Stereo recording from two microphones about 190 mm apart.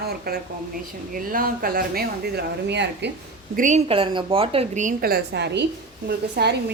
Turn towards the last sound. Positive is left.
turn(degrees=-55)  # may be behind; listen again after turning